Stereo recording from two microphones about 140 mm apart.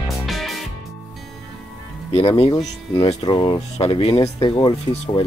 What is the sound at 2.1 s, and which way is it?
Speech, 45° left (ahead or behind).